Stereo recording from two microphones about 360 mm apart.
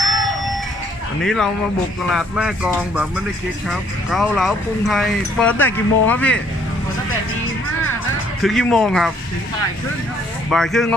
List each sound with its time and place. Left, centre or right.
0.0 s music: centre
1.2 s speech: centre
8.4 s speech: centre
10.5 s speech: centre